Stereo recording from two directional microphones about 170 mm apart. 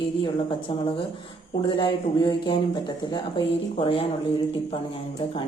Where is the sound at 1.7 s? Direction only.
25° left (ahead or behind).